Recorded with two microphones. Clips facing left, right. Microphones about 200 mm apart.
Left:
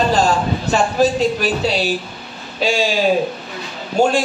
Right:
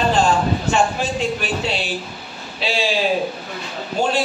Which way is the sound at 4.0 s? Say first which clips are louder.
Left 6 dB; 45° left (ahead or behind).